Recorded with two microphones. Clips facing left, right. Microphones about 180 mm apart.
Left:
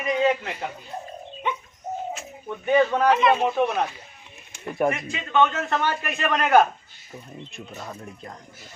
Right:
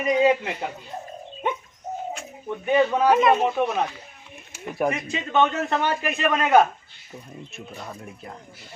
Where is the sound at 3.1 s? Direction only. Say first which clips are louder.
Right 3 dB; 45° right (ahead or behind).